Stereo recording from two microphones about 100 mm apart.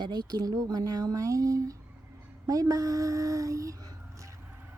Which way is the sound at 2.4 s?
35° right (ahead or behind).